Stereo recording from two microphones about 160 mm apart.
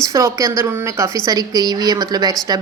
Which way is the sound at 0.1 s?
20° right (ahead or behind).